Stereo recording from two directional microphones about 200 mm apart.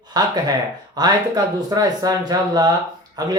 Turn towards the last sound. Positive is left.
turn(degrees=-20)  # may be behind; listen again after turning